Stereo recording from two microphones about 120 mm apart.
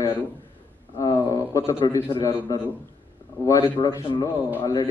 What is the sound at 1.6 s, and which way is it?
A man's voice, 45° left (ahead or behind).